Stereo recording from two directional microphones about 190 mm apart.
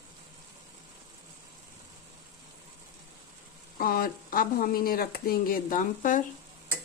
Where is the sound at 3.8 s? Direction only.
50° left (ahead or behind).